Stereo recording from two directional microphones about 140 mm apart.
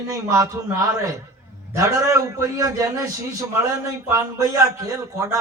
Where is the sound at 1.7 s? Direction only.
20° right (ahead or behind).